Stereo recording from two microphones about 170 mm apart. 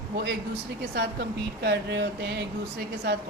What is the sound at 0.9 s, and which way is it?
Speech, 70° right (ahead or behind).